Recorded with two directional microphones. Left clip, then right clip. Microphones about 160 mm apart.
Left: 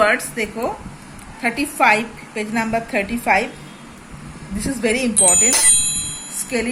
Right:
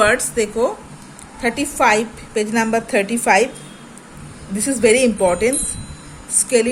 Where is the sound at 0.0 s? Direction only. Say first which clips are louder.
Right 1 dB; 40° right (ahead or behind); by 3.5 s 55° right (ahead or behind).